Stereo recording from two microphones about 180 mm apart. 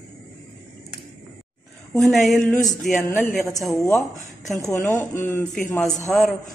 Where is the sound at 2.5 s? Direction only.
20° left (ahead or behind).